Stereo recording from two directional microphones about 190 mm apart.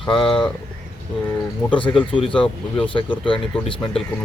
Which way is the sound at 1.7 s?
25° left (ahead or behind).